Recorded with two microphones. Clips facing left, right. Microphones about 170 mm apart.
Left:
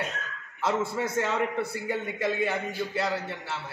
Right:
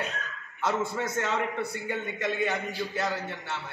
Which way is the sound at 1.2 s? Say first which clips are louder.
Left 2 dB; 5° left (ahead or behind).